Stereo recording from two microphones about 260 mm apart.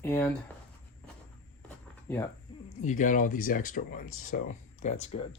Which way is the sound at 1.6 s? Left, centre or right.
Centre.